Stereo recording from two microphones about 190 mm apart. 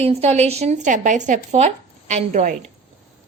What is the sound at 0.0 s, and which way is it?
A woman's voice, 35° right (ahead or behind).